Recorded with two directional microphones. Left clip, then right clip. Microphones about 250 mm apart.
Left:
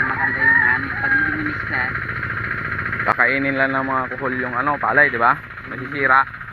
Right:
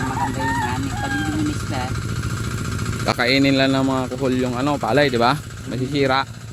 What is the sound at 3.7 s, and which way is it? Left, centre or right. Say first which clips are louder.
Speech: left 1 dB; right.